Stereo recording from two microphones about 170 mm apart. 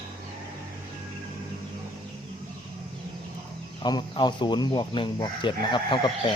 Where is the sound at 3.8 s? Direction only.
25° left (ahead or behind).